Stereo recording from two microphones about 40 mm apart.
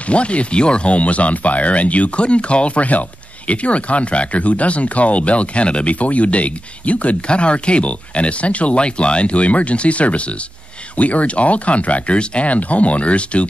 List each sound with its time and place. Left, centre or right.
0.1 s speech: left